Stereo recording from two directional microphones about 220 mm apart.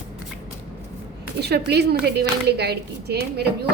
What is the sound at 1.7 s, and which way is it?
A woman's voice, 50° right (ahead or behind).